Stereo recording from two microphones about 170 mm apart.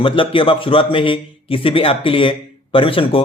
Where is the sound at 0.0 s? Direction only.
30° left (ahead or behind).